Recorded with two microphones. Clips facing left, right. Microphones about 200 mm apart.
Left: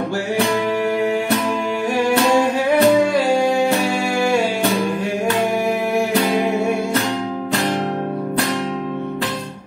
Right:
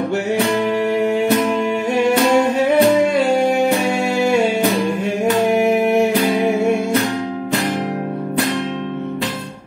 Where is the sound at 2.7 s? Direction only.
20° right (ahead or behind).